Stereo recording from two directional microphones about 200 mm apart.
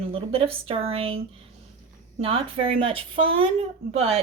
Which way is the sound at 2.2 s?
25° right (ahead or behind).